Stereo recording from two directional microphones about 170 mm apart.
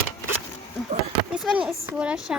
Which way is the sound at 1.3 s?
5° right (ahead or behind).